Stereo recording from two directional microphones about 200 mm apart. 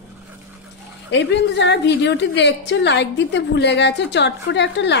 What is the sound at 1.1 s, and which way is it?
A woman's voice, 60° left (ahead or behind).